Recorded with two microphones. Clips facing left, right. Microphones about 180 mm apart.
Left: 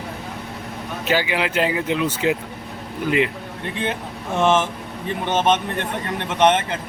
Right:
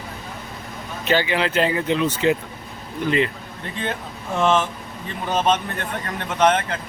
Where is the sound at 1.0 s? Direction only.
10° left (ahead or behind).